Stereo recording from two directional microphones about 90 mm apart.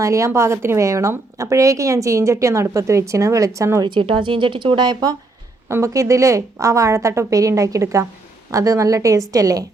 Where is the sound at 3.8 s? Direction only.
65° right (ahead or behind).